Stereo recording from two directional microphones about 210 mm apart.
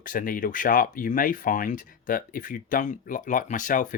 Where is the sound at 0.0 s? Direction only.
40° left (ahead or behind).